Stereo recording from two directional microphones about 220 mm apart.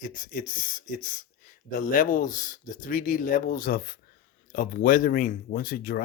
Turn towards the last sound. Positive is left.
turn(degrees=45)  # may be behind; listen again after turning